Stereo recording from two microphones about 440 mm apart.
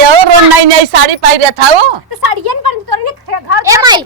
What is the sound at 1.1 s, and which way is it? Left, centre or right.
Speech, right.